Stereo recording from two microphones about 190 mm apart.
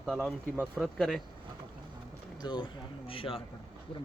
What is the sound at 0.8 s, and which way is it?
Speech, centre (ahead or behind).